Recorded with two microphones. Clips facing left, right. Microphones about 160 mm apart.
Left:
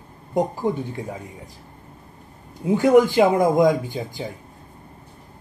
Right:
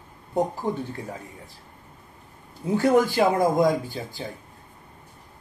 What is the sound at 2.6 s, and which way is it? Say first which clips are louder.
Speech: left 5 dB; 15° left (ahead or behind).